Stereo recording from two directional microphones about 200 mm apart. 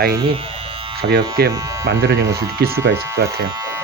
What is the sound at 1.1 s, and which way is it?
Speech, 60° right (ahead or behind).